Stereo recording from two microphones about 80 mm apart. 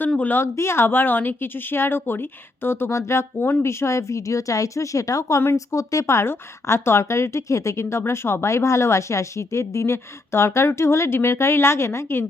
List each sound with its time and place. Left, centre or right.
0.2 s speech: left
0.4 s a woman's voice: left